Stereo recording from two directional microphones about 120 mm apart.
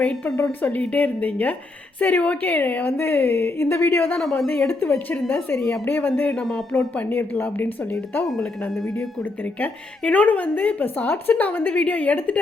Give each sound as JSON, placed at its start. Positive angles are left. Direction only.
{"t": 0.6, "sound": "a woman's voice", "side_deg": 10}
{"t": 4.2, "sound": "speech", "side_deg": 5}
{"t": 4.7, "sound": "a woman's voice", "side_deg": 20}
{"t": 6.9, "sound": "a woman's voice", "side_deg": 15}
{"t": 9.6, "sound": "a woman's voice", "side_deg": 10}